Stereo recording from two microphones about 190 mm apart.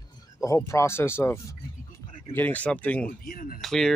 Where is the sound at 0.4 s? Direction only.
15° left (ahead or behind).